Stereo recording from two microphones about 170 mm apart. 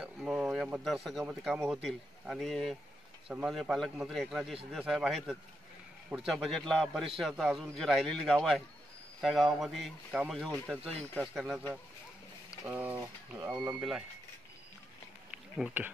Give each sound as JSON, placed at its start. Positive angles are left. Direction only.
{"t": 0.0, "sound": "a man's voice", "side_deg": -5}
{"t": 10.8, "sound": "speech", "side_deg": -35}
{"t": 11.1, "sound": "a man's voice", "side_deg": 0}
{"t": 15.3, "sound": "a sound", "side_deg": -5}